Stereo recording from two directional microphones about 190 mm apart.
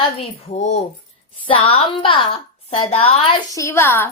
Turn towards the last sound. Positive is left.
turn(degrees=10)  # may be behind; listen again after turning